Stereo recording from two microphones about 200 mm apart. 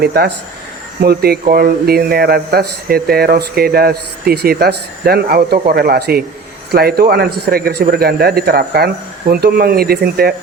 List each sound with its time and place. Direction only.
0.0 s speech: 50° right (ahead or behind)